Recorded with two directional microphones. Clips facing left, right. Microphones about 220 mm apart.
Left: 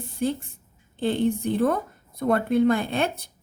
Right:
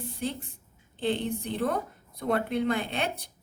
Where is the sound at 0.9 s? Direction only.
45° left (ahead or behind).